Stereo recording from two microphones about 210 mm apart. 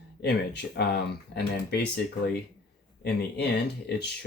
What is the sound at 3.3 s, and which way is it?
Speech, 50° left (ahead or behind).